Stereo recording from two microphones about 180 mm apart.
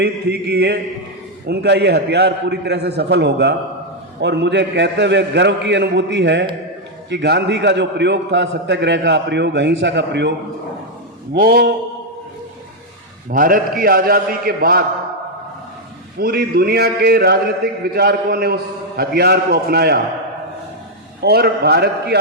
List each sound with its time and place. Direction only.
0.0 s a man's voice: 65° right (ahead or behind)
11.3 s a man's voice: 60° right (ahead or behind)
13.3 s a man's voice: 50° right (ahead or behind)
16.2 s a man's voice: 60° right (ahead or behind)
21.2 s a man's voice: 60° right (ahead or behind)